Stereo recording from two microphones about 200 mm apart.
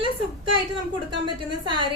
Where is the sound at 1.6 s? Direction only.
25° right (ahead or behind).